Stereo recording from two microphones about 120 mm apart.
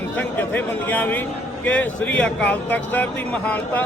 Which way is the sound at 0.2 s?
15° left (ahead or behind).